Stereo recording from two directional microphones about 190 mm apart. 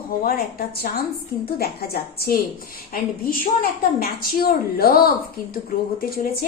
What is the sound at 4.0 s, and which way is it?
A woman's voice, 50° left (ahead or behind).